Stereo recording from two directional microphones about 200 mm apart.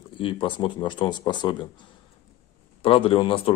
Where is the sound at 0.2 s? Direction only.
25° left (ahead or behind).